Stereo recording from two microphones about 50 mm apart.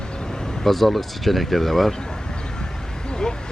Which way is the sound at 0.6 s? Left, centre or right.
Centre.